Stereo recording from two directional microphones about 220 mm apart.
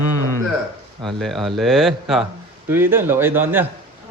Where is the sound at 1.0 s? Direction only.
Centre (ahead or behind).